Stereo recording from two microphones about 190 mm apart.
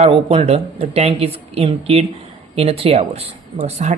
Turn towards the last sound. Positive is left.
turn(degrees=-35)  # may be behind; listen again after turning